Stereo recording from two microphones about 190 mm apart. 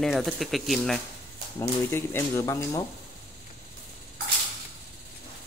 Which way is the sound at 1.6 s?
10° left (ahead or behind).